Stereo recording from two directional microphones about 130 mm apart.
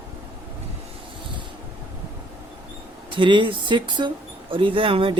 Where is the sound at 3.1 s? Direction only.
40° right (ahead or behind).